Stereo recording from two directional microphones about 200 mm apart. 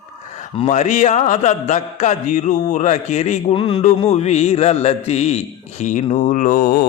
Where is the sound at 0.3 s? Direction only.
35° left (ahead or behind).